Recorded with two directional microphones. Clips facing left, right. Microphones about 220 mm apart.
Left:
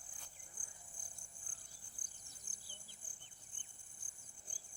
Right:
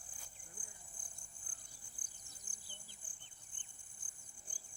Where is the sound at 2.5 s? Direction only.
35° right (ahead or behind).